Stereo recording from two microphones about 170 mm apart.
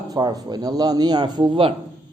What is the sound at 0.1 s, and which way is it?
Speech, 20° right (ahead or behind).